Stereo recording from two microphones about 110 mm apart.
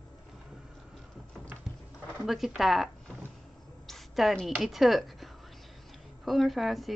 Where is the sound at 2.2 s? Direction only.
5° right (ahead or behind).